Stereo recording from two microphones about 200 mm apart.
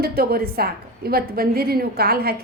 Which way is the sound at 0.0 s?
50° right (ahead or behind).